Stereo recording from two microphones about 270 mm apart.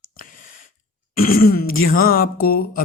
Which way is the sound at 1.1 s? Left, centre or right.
Left.